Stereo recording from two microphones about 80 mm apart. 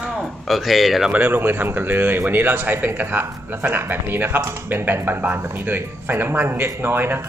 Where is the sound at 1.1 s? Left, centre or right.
Right.